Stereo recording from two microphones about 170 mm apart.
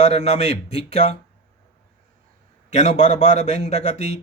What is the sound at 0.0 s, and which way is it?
A man's voice, 40° left (ahead or behind).